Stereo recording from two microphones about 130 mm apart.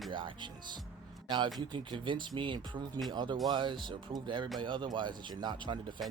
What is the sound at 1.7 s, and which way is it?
Speech, 40° right (ahead or behind).